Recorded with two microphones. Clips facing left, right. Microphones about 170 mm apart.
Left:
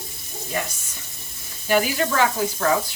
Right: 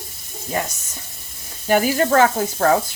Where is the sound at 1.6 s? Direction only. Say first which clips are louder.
Right 4 dB; 45° right (ahead or behind).